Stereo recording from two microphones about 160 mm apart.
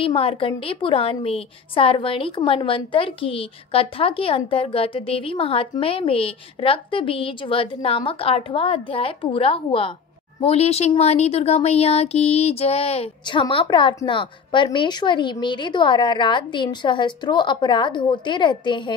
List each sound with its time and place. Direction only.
0.0 s a woman's voice: 35° left (ahead or behind)